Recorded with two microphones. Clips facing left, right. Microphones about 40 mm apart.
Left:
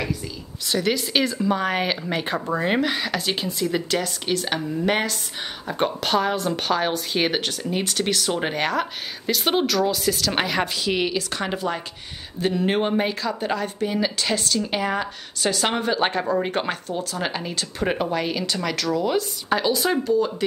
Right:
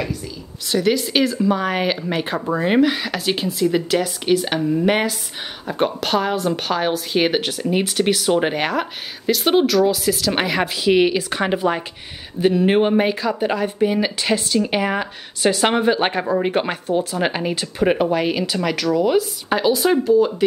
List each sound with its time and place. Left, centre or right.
0.7 s a woman's voice: centre; by 17.6 s right
17.7 s speech: centre